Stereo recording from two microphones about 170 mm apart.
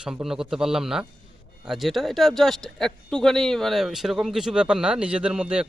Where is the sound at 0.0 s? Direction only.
5° right (ahead or behind).